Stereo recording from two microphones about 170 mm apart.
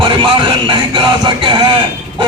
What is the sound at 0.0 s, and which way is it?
Speech, 30° right (ahead or behind).